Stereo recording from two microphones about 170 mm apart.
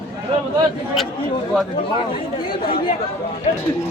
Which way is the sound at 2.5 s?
60° left (ahead or behind).